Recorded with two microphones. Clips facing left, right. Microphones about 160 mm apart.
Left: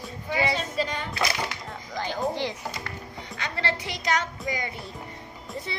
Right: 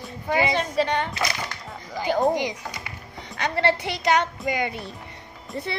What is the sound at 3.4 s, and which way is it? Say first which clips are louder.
Speech: right 8 dB; 60° right (ahead or behind).